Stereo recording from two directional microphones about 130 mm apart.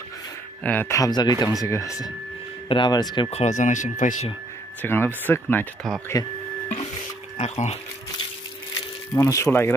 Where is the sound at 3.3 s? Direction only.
65° left (ahead or behind).